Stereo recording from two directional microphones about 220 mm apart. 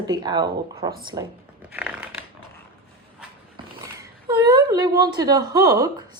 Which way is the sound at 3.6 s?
20° right (ahead or behind).